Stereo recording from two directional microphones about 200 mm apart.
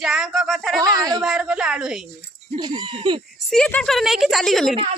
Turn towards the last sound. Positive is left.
turn(degrees=0)  # may be behind; listen again after turning